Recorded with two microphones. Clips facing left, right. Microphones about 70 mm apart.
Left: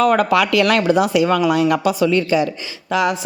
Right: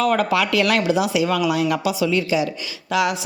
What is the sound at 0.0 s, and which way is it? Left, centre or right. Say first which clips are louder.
A woman's voice: left 4 dB; left.